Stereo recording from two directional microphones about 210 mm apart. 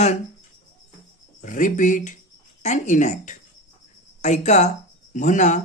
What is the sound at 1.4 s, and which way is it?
Speech, 40° left (ahead or behind).